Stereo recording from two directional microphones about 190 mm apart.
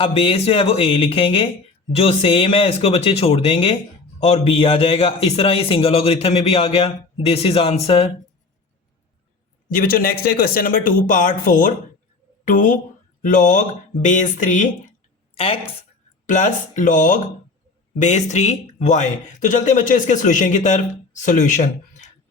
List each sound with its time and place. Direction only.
0.0 s speech: 30° left (ahead or behind)
9.6 s speech: 45° left (ahead or behind)
15.4 s speech: 30° left (ahead or behind)
16.2 s speech: 40° left (ahead or behind)